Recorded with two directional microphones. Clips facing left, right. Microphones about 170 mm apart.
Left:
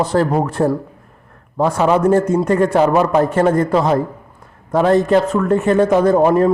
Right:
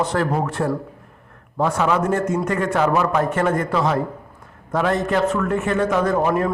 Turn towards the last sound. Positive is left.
turn(degrees=35)  # may be behind; listen again after turning